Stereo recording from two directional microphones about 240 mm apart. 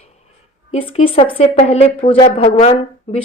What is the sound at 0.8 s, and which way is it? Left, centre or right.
A woman's voice, left.